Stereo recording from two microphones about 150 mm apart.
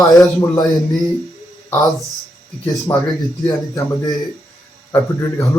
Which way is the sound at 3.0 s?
25° left (ahead or behind).